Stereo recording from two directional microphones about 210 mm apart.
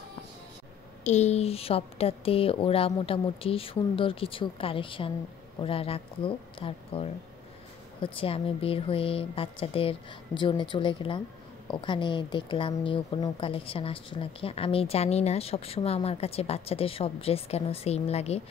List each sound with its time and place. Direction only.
1.0 s a woman's voice: 30° left (ahead or behind)